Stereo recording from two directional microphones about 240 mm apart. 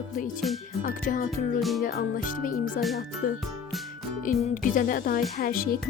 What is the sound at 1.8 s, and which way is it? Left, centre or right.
Speech, left.